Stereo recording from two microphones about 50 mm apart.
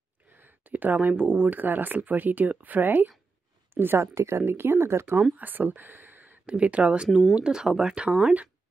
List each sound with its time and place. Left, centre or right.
0.3 s speech: right
4.0 s speech: right
5.3 s speech: right
5.8 s a sound: right
6.4 s speech: right
7.1 s speech: centre
7.3 s speech: centre